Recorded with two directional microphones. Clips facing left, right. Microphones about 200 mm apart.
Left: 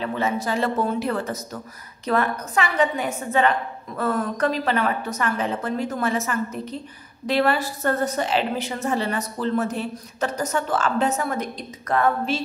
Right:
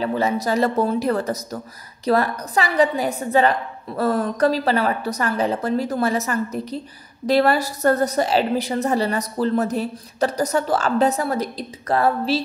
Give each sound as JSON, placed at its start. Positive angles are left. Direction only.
{"t": 0.0, "sound": "a woman's voice", "side_deg": -35}